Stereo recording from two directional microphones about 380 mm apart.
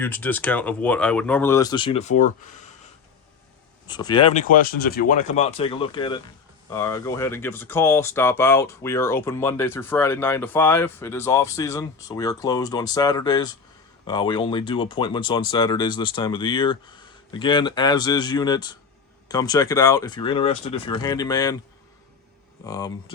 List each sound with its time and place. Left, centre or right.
0.0 s speech: centre
3.8 s speech: centre
22.6 s speech: centre